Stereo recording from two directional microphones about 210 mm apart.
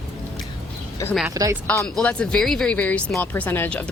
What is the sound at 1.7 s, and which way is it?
Speech, 5° left (ahead or behind).